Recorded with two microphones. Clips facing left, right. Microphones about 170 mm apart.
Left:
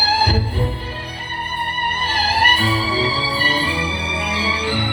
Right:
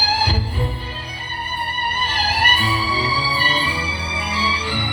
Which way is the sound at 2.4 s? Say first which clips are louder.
Left 3 dB; 50° left (ahead or behind).